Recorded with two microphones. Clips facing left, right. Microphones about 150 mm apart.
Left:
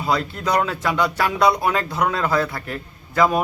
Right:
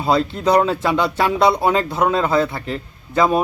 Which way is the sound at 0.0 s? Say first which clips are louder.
Right 5 dB; 25° right (ahead or behind).